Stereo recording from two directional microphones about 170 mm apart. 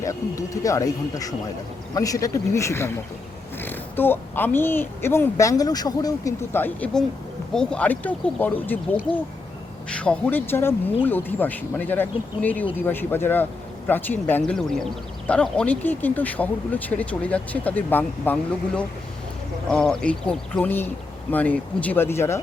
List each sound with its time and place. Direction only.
0.0 s speech: 20° left (ahead or behind)